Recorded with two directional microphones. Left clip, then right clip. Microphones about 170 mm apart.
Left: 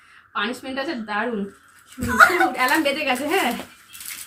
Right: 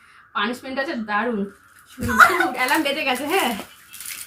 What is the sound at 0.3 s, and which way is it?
A woman's voice, 10° right (ahead or behind).